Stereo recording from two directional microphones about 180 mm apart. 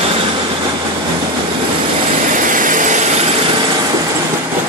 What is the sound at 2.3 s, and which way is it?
Vehicle, 45° right (ahead or behind).